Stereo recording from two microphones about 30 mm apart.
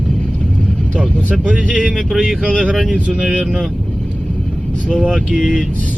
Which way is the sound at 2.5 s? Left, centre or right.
Right.